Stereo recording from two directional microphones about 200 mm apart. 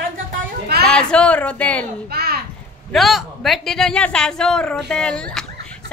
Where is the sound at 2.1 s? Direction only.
50° right (ahead or behind).